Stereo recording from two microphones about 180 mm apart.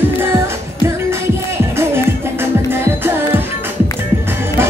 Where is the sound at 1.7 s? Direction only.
15° right (ahead or behind).